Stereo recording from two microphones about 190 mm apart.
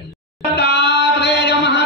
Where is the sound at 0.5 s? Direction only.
60° left (ahead or behind).